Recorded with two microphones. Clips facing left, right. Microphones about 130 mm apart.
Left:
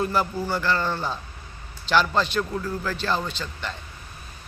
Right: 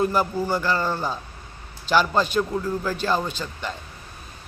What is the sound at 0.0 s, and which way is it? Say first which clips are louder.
A man's voice: right 3 dB; 10° right (ahead or behind).